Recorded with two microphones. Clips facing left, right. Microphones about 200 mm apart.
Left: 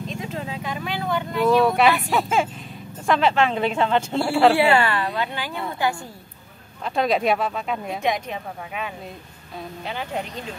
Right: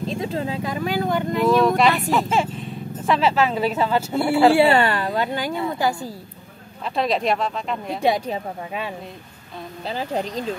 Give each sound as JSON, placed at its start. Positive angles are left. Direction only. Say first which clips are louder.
{"t": 0.0, "sound": "speech", "louder": "right 5 dB", "side_deg": -35}
{"t": 1.4, "sound": "speech", "louder": "even", "side_deg": 0}
{"t": 4.6, "sound": "speech", "louder": "right 2 dB", "side_deg": -35}
{"t": 6.8, "sound": "speech", "louder": "left 1 dB", "side_deg": 0}
{"t": 8.0, "sound": "speech", "louder": "right 8 dB", "side_deg": -35}